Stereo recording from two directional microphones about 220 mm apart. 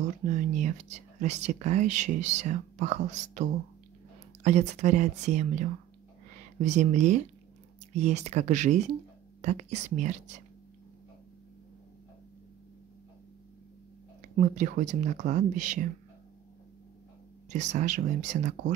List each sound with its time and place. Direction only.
0.2 s speech: 35° right (ahead or behind)
14.3 s speech: 35° right (ahead or behind)
17.5 s speech: 35° right (ahead or behind)